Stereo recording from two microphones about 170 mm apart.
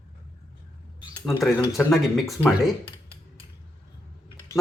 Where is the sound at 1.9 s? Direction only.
Centre (ahead or behind).